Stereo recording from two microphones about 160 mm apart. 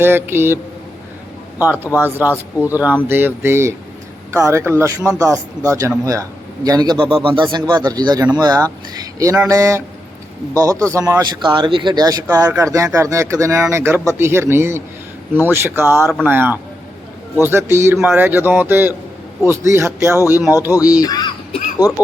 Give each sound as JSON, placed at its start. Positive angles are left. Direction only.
{"t": 0.0, "sound": "a man's voice", "side_deg": -15}
{"t": 20.6, "sound": "speech", "side_deg": 20}